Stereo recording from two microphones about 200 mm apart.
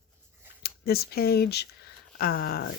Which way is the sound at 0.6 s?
50° left (ahead or behind).